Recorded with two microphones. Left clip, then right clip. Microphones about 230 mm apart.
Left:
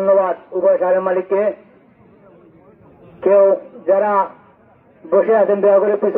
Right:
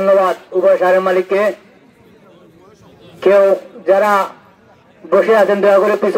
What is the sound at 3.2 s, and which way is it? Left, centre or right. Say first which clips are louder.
A man's voice: right 2 dB; right.